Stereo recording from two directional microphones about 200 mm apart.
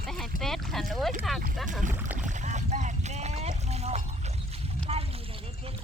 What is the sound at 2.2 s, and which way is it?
Boat, 40° right (ahead or behind).